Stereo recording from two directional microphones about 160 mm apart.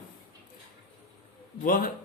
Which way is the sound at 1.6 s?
60° left (ahead or behind).